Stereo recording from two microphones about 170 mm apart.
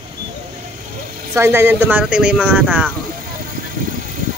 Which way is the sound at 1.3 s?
15° right (ahead or behind).